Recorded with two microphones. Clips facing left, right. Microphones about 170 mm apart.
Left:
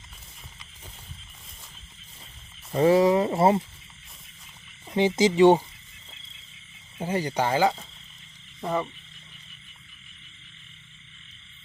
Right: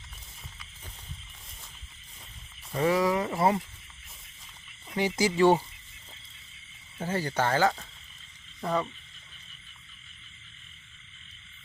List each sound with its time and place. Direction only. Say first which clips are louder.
2.7 s speech: left 6 dB; 30° left (ahead or behind)
4.9 s speech: left 6 dB; 25° left (ahead or behind)
7.0 s speech: left 3 dB; 15° left (ahead or behind)